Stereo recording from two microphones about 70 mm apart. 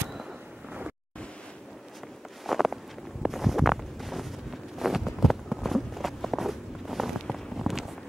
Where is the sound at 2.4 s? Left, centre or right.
Centre.